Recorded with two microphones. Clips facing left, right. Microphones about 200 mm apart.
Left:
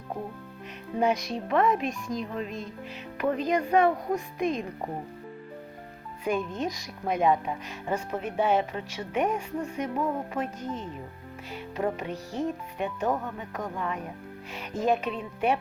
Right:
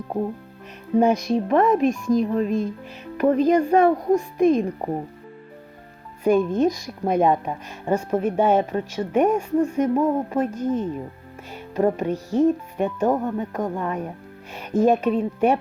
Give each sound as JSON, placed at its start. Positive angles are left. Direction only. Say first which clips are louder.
{"t": 0.9, "sound": "a woman's voice", "louder": "right 8 dB", "side_deg": -45}
{"t": 6.2, "sound": "a woman's voice", "louder": "right 11 dB", "side_deg": -45}